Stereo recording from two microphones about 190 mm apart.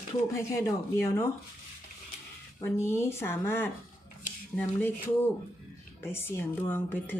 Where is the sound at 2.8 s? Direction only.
15° left (ahead or behind).